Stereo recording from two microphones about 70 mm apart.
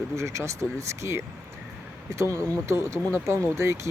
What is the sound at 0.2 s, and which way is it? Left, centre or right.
Speech, right.